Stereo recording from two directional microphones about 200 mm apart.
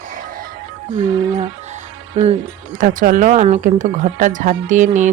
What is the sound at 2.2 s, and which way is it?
Speech, 35° right (ahead or behind).